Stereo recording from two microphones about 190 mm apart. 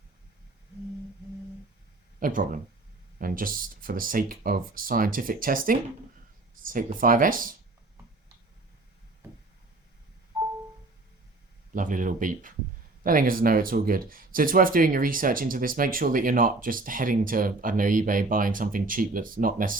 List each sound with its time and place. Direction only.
2.1 s speech: 45° right (ahead or behind)
11.7 s speech: 45° right (ahead or behind)